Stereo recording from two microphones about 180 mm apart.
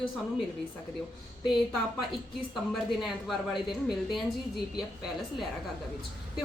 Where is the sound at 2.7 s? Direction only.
Centre (ahead or behind).